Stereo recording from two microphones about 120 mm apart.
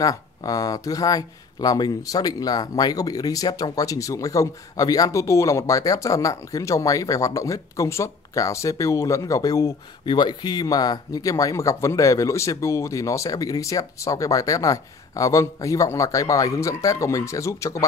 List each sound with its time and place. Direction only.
0.0 s speech: 30° left (ahead or behind)